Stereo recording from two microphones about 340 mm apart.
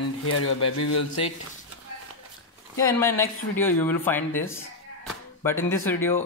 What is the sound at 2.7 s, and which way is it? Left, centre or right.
Speech, centre.